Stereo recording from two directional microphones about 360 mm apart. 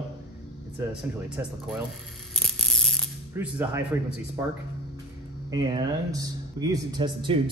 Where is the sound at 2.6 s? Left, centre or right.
Centre.